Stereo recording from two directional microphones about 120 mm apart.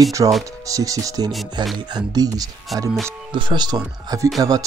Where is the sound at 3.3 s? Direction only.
40° right (ahead or behind).